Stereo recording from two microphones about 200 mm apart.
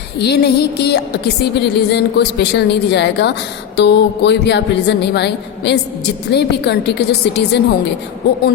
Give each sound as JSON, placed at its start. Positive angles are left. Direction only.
{"t": 0.2, "sound": "a woman's voice", "side_deg": 55}